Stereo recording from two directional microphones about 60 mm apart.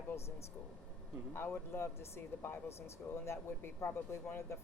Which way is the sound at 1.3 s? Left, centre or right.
Left.